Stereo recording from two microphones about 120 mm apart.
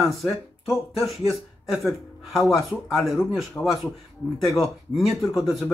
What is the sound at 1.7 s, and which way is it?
Speech, centre (ahead or behind).